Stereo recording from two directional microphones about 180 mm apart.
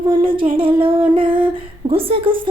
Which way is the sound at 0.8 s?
30° right (ahead or behind).